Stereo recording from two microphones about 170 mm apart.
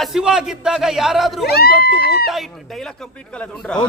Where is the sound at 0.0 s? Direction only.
Centre (ahead or behind).